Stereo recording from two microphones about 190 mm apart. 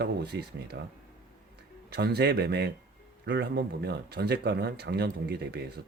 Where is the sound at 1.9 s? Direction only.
60° right (ahead or behind).